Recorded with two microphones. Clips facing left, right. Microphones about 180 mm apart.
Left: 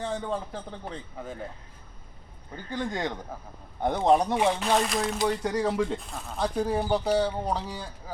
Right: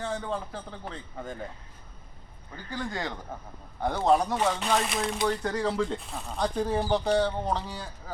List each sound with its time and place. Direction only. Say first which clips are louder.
0.0 s speech: left 1 dB; 15° left (ahead or behind)
2.6 s speech: left 3 dB; 20° left (ahead or behind)
4.6 s speech: left 2 dB; centre (ahead or behind)
5.4 s speech: left 2 dB; 10° left (ahead or behind)
6.0 s speech: even; centre (ahead or behind)